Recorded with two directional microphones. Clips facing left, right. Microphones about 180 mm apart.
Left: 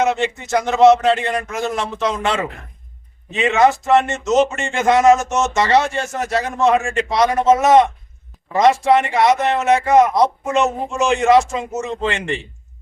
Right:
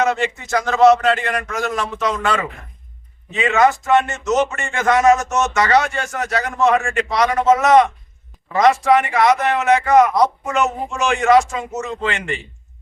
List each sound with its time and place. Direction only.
0.0 s speech: 20° left (ahead or behind)